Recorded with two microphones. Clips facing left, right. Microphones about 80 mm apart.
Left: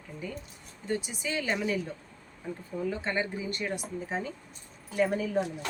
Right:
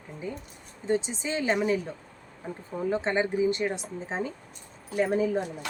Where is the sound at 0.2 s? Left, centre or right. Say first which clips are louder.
Right 4 dB; right.